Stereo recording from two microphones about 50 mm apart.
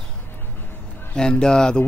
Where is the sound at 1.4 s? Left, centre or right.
Centre.